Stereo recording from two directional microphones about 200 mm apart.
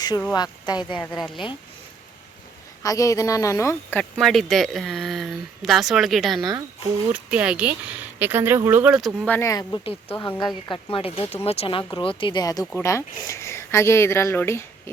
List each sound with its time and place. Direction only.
0.3 s speech: 20° left (ahead or behind)
1.0 s speech: centre (ahead or behind)
2.8 s speech: 15° left (ahead or behind)
4.2 s speech: centre (ahead or behind); by 10.2 s 25° left (ahead or behind)
10.2 s speech: 15° left (ahead or behind)
10.7 s speech: 30° left (ahead or behind); by 14.6 s 10° left (ahead or behind)